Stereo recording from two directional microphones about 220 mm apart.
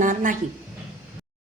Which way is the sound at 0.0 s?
35° right (ahead or behind).